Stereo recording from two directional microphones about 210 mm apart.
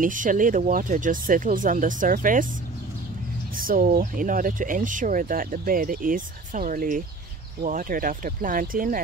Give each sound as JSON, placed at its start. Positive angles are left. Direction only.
{"t": 0.0, "sound": "speech", "side_deg": -40}
{"t": 3.5, "sound": "speech", "side_deg": -40}